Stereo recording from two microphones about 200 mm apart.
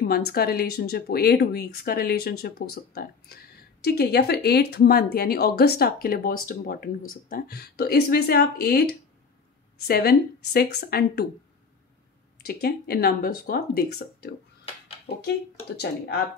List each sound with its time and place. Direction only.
0.3 s speech: 50° left (ahead or behind)
12.4 s speech: 50° left (ahead or behind)